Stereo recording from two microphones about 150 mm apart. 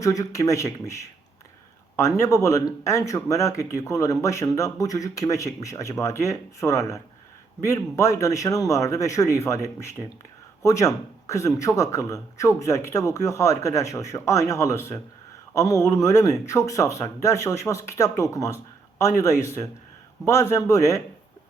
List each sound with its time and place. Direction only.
0.0 s speech: 20° left (ahead or behind)
2.0 s speech: 20° left (ahead or behind)